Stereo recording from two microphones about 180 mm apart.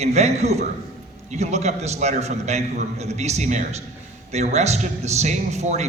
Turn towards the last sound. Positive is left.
turn(degrees=-40)  # may be behind; listen again after turning